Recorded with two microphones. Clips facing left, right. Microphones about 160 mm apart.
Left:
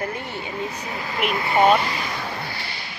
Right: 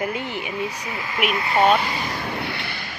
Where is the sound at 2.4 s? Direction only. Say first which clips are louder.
Right 3 dB; 65° right (ahead or behind).